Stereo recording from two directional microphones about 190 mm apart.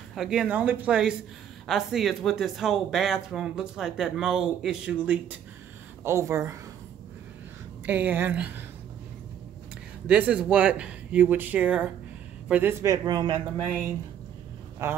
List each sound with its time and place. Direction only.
0.1 s speech: 5° right (ahead or behind)
7.8 s speech: 10° right (ahead or behind)
10.0 s speech: 10° right (ahead or behind); by 13.4 s 25° right (ahead or behind)